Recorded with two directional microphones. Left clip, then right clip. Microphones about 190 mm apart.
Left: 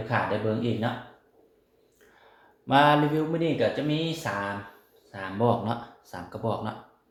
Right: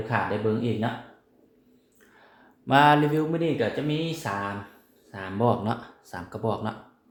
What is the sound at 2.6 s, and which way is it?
Speech, 25° right (ahead or behind).